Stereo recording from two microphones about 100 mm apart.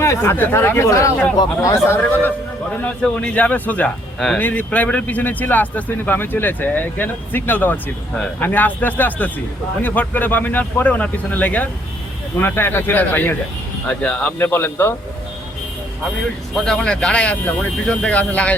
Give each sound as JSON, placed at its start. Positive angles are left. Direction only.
{"t": 0.0, "sound": "speech", "side_deg": 25}
{"t": 16.6, "sound": "speech", "side_deg": 5}